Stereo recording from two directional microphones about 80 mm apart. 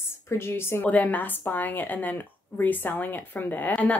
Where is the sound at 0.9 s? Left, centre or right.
Left.